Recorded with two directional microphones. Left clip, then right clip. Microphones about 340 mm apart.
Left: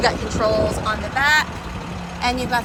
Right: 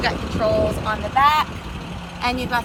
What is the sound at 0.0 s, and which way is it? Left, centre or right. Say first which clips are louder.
Speech: left 2 dB; centre.